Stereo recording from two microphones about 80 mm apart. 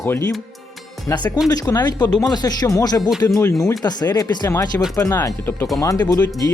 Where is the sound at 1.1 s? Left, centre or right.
Left.